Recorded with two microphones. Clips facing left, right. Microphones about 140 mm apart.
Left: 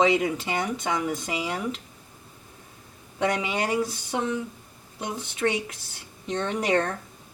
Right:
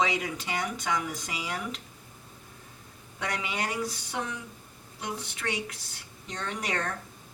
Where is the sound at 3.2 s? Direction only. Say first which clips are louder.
Left 7 dB; 25° left (ahead or behind).